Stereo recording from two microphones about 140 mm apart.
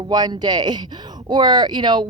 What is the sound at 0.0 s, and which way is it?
Speech, 30° right (ahead or behind).